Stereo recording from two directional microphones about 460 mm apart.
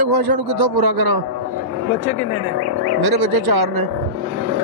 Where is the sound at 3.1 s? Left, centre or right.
Right.